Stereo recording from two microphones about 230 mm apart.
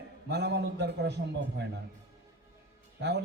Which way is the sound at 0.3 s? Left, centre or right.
Right.